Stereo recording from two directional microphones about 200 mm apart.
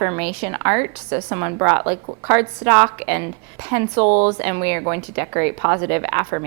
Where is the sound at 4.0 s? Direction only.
30° right (ahead or behind).